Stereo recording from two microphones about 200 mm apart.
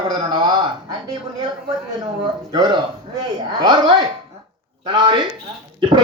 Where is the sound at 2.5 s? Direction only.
20° right (ahead or behind).